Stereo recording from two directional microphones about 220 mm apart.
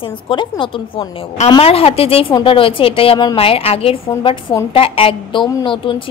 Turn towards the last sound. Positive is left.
turn(degrees=20)  # may be behind; listen again after turning